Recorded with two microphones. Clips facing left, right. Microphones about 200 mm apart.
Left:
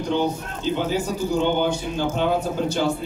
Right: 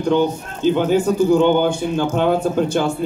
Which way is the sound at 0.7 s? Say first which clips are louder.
Right 8 dB; 55° right (ahead or behind).